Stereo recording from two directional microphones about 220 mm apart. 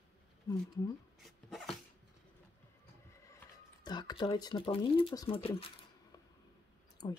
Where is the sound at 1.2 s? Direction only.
Centre (ahead or behind).